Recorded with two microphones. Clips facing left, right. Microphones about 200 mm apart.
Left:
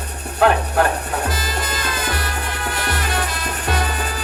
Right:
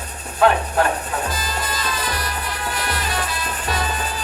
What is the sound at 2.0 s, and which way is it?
Music, 55° left (ahead or behind).